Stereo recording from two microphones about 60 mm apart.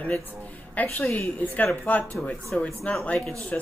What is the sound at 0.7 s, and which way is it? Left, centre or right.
Speech, left.